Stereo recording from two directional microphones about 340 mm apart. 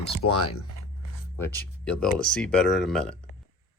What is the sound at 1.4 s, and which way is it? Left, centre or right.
Speech, centre.